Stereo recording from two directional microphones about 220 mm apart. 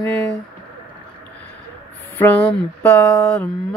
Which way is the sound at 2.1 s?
5° left (ahead or behind).